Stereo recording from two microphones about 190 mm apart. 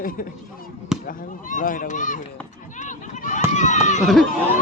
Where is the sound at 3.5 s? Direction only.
40° left (ahead or behind).